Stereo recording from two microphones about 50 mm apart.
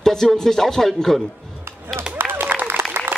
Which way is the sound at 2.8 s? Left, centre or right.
Right.